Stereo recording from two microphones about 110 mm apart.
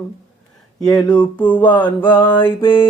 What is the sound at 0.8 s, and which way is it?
Mantra, 5° left (ahead or behind).